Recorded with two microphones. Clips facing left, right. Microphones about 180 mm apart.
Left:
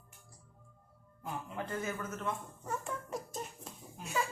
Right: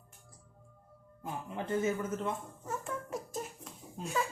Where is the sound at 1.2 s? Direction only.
25° right (ahead or behind).